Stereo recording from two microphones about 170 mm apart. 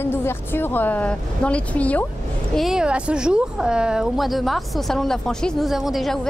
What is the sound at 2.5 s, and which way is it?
A woman's voice, 5° right (ahead or behind).